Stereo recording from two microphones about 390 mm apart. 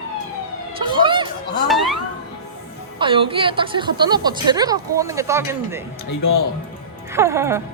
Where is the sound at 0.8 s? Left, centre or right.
Centre.